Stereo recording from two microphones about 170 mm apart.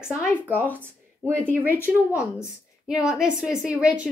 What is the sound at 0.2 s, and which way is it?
Speech, 10° left (ahead or behind).